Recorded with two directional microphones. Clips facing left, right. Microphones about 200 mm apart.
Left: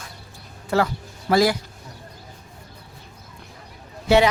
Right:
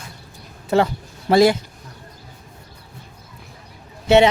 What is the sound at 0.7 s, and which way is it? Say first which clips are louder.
Speech: right 4 dB; 20° right (ahead or behind).